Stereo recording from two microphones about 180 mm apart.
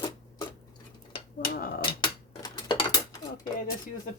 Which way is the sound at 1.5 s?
55° left (ahead or behind).